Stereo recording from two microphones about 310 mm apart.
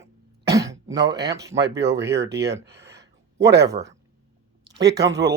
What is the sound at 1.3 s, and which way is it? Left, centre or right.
Speech, centre.